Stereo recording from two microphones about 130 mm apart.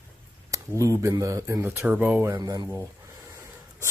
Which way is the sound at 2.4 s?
30° right (ahead or behind).